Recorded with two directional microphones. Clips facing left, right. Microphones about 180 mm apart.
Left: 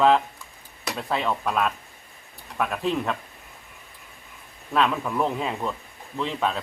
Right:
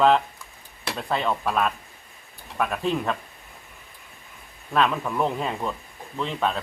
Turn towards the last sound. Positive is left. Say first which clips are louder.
# even
turn(degrees=0)  # may be behind; listen again after turning